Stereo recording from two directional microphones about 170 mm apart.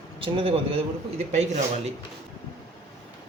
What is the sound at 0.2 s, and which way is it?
Speech, 35° right (ahead or behind).